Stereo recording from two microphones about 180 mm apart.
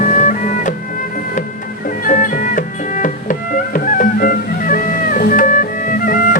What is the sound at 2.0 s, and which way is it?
Music, 45° left (ahead or behind).